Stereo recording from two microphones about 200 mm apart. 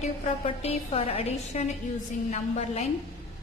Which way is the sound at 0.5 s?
30° left (ahead or behind).